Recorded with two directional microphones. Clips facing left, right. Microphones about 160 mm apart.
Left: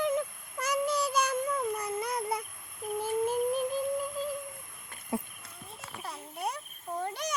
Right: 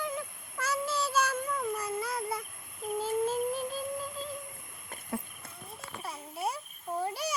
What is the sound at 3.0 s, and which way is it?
Child singing, 15° left (ahead or behind).